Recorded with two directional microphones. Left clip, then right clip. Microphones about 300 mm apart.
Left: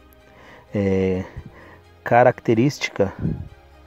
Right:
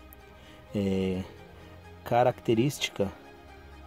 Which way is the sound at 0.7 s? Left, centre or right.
Centre.